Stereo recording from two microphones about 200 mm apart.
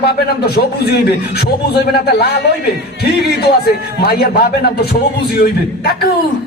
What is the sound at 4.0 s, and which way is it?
A man's voice, 50° left (ahead or behind).